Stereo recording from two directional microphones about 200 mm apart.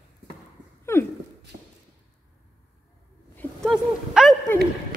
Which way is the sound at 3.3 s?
Centre (ahead or behind).